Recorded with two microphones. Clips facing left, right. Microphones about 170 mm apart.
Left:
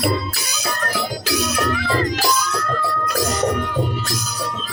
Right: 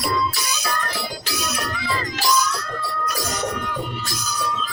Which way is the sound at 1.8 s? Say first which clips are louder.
Left 6 dB; 50° left (ahead or behind).